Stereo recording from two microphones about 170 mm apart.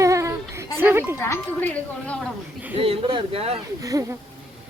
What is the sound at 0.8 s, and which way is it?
Speech, 15° right (ahead or behind).